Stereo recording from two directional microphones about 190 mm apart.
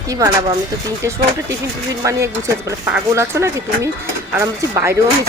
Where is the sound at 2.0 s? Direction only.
15° right (ahead or behind).